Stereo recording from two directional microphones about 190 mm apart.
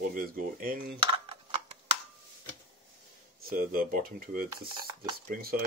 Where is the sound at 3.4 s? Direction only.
50° right (ahead or behind).